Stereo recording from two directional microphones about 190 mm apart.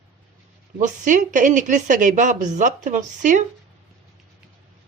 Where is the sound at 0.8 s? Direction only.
40° right (ahead or behind).